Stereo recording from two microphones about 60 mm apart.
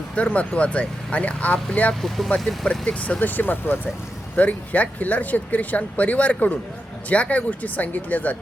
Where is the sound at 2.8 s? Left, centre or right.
Left.